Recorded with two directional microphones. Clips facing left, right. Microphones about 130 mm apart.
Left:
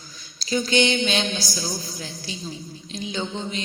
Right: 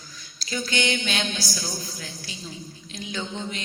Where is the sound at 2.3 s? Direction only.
25° left (ahead or behind).